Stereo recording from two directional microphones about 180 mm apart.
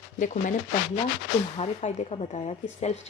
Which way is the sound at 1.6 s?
35° left (ahead or behind).